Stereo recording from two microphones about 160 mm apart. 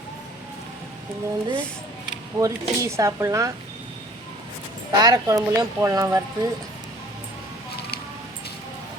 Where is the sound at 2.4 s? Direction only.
20° right (ahead or behind).